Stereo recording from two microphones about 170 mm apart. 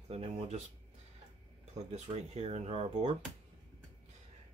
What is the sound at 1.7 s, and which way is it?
Speech, 40° right (ahead or behind).